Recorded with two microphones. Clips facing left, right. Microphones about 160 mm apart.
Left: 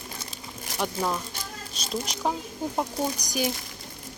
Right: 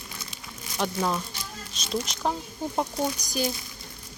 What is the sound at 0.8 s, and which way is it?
Speech, centre (ahead or behind).